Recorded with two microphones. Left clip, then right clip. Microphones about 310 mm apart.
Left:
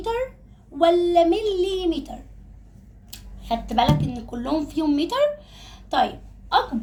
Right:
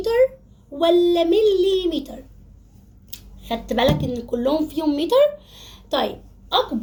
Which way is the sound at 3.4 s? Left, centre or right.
Left.